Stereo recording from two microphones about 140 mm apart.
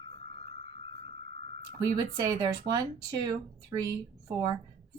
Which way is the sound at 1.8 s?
25° right (ahead or behind).